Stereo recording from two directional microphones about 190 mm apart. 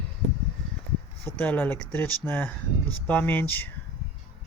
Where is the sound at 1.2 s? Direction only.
10° left (ahead or behind).